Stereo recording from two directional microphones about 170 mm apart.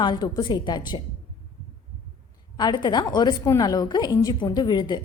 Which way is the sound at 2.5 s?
25° left (ahead or behind).